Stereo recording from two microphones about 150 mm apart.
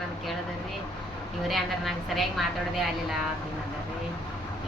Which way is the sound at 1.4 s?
Centre (ahead or behind).